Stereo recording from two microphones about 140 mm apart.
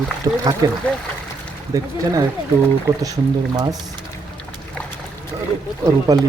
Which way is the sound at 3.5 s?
30° right (ahead or behind).